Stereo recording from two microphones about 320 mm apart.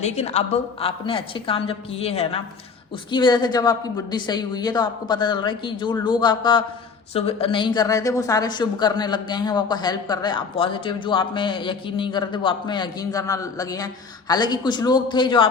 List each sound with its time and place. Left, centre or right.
0.0 s a woman's voice: left